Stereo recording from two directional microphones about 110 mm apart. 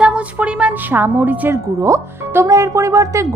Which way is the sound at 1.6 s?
25° right (ahead or behind).